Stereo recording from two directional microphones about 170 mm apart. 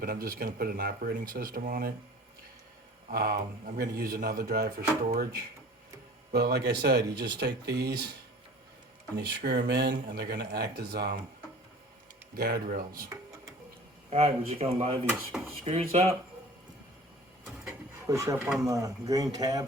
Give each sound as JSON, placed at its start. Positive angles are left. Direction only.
{"t": 0.0, "sound": "speech", "side_deg": -60}
{"t": 3.1, "sound": "speech", "side_deg": -60}
{"t": 6.3, "sound": "speech", "side_deg": -75}
{"t": 9.2, "sound": "speech", "side_deg": -75}
{"t": 12.4, "sound": "speech", "side_deg": -65}
{"t": 14.1, "sound": "speech", "side_deg": -35}
{"t": 18.0, "sound": "speech", "side_deg": -20}
{"t": 18.3, "sound": "speech", "side_deg": 0}
{"t": 18.6, "sound": "speech", "side_deg": -20}